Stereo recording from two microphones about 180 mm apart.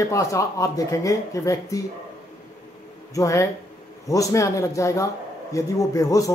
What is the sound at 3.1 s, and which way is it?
Speech, 20° left (ahead or behind).